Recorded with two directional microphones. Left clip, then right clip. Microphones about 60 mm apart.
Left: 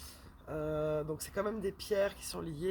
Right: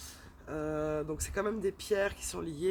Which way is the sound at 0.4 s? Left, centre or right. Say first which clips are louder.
Right 1 dB; right.